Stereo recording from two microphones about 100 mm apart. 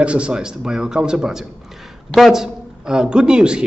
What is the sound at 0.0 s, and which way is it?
A man's voice, 10° right (ahead or behind).